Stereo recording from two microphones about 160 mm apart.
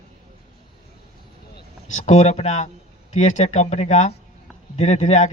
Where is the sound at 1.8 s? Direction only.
50° left (ahead or behind).